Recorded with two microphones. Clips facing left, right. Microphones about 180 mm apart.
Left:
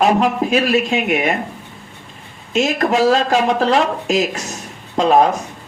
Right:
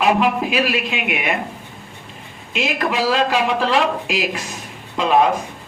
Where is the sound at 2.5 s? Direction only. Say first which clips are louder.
Left 5 dB; 45° left (ahead or behind).